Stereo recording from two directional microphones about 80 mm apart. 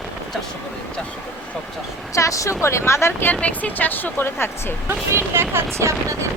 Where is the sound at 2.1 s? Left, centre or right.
Left.